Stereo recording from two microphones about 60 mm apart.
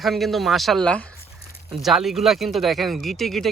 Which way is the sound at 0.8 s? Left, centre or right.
Centre.